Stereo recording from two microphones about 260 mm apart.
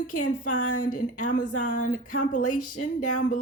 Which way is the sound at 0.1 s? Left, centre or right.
Left.